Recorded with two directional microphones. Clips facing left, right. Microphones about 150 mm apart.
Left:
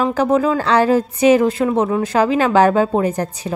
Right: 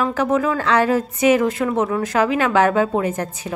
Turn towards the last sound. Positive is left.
turn(degrees=35)  # may be behind; listen again after turning